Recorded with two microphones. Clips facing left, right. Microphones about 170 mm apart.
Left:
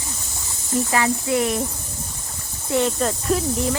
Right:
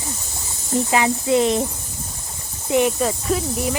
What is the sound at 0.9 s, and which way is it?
Speech, 20° right (ahead or behind).